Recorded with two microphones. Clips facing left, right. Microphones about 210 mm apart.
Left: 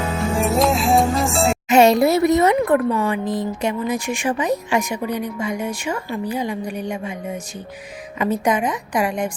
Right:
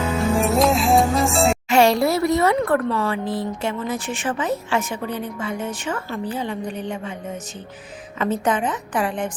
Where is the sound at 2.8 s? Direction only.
15° left (ahead or behind).